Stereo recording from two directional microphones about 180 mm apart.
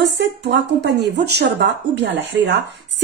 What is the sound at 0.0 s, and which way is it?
Speech, 75° right (ahead or behind).